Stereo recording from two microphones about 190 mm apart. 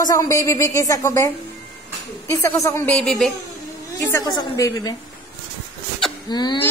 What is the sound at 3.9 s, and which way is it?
Speech, 15° left (ahead or behind).